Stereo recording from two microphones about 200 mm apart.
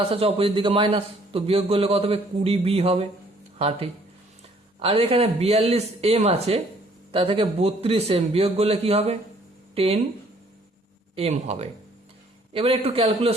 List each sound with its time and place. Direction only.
0.1 s a man's voice: 30° right (ahead or behind)
11.1 s a man's voice: 30° right (ahead or behind)